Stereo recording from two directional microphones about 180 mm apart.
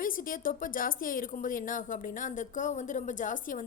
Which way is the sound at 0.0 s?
50° left (ahead or behind).